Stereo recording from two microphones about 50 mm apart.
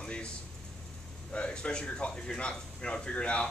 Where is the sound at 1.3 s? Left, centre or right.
Left.